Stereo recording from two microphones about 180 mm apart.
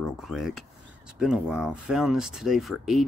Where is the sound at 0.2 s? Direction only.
Centre (ahead or behind).